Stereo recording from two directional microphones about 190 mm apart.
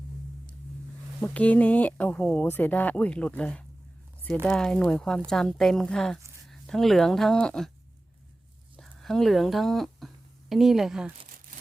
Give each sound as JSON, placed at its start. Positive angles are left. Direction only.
{"t": 1.2, "sound": "speech", "side_deg": 5}
{"t": 8.7, "sound": "speech", "side_deg": 0}